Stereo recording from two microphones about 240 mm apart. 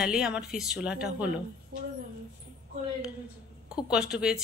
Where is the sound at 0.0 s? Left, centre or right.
Centre.